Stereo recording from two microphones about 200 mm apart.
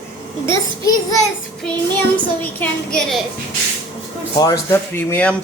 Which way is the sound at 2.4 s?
5° left (ahead or behind).